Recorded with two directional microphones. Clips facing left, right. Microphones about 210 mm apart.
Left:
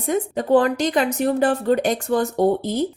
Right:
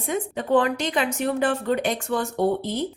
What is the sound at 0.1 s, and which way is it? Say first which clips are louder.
Speech: left 4 dB; 40° left (ahead or behind).